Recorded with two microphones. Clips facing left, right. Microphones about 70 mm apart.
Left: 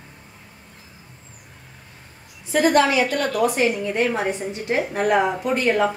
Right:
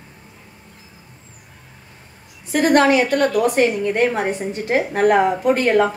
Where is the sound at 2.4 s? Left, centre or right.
Right.